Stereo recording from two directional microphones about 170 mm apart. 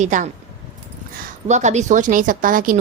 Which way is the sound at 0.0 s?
45° right (ahead or behind).